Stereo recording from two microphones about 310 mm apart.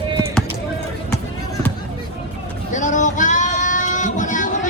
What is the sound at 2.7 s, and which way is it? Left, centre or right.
Child singing, left.